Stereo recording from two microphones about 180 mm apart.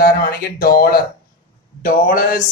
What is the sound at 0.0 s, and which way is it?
Speech, 55° left (ahead or behind).